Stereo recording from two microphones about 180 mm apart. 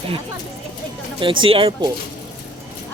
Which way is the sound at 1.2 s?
30° right (ahead or behind).